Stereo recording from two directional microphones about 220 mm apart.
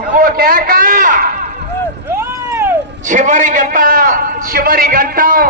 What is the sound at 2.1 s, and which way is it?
Vehicle, 10° right (ahead or behind).